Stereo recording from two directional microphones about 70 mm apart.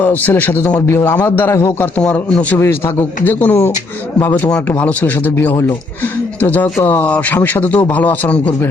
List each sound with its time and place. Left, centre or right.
0.0 s a man's voice: left
2.0 s a man's voice: centre
2.6 s a man's voice: left